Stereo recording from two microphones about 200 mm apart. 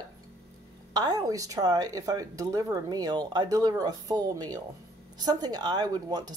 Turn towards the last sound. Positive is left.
turn(degrees=-20)  # may be behind; listen again after turning